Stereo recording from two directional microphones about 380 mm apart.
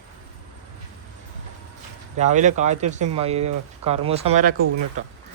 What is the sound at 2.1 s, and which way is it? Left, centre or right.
Speech, centre.